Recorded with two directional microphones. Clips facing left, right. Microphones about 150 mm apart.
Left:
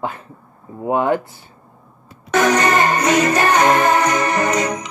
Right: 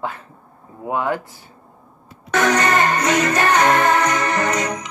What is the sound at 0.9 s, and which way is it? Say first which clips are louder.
Speech: left 5 dB; 25° left (ahead or behind).